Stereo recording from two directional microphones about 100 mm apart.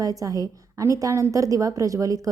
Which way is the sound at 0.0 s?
35° right (ahead or behind).